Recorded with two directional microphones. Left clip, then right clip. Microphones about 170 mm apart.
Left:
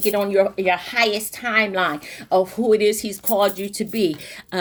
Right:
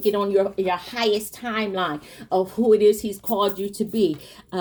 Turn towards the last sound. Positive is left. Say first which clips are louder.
# even
turn(degrees=15)  # may be behind; listen again after turning